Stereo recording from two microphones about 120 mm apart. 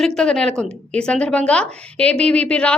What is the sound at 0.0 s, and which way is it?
A woman's voice, 5° left (ahead or behind).